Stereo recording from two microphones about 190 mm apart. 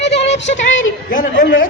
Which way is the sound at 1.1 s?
45° left (ahead or behind).